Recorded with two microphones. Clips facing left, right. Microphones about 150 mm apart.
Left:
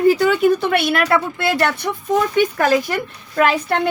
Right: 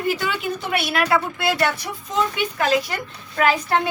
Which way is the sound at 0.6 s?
60° left (ahead or behind).